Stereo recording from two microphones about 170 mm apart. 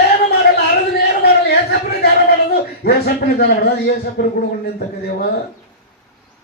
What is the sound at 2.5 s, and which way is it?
A man's voice, 65° left (ahead or behind).